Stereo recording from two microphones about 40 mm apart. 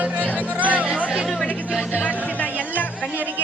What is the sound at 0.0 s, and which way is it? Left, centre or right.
Music, right.